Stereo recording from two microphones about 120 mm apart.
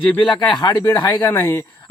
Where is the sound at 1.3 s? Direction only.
20° left (ahead or behind).